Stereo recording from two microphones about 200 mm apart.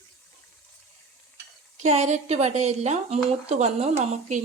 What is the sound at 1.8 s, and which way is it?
Speech, 35° right (ahead or behind).